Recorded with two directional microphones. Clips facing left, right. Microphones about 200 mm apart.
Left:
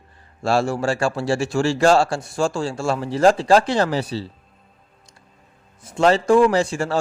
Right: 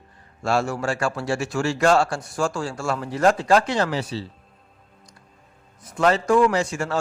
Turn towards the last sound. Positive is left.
turn(degrees=30)  # may be behind; listen again after turning